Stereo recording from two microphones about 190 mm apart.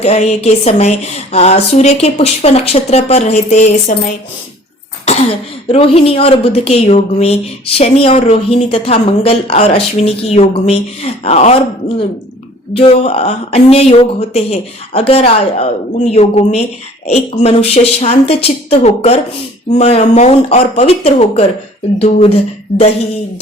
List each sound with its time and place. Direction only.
0.0 s a woman's voice: 35° left (ahead or behind)
5.1 s cough: 35° left (ahead or behind)
5.6 s a woman's voice: 30° left (ahead or behind)
12.7 s a woman's voice: 30° left (ahead or behind)